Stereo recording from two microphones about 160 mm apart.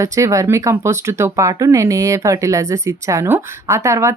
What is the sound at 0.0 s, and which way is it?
Speech, 20° right (ahead or behind).